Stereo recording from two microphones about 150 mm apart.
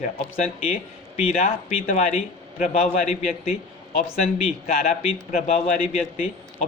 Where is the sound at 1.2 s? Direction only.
50° left (ahead or behind).